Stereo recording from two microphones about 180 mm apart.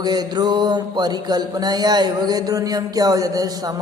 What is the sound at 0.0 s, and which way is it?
Mantra, 20° right (ahead or behind).